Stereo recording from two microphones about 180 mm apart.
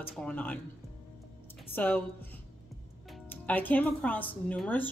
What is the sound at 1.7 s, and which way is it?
Speech, 10° left (ahead or behind).